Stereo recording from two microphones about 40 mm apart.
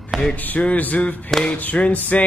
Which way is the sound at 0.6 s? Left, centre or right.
Left.